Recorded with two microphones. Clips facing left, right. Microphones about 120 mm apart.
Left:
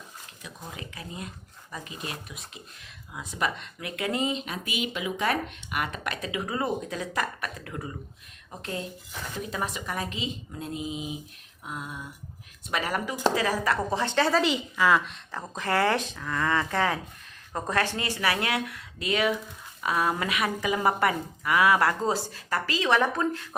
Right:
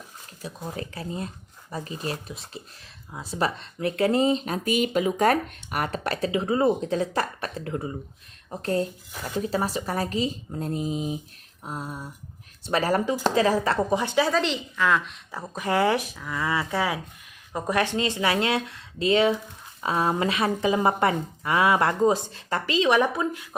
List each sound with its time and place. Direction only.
0.4 s speech: 35° right (ahead or behind)
8.6 s a woman's voice: 40° right (ahead or behind)
13.9 s speech: 15° right (ahead or behind)
14.3 s a woman's voice: 5° left (ahead or behind)
15.3 s a woman's voice: 10° right (ahead or behind)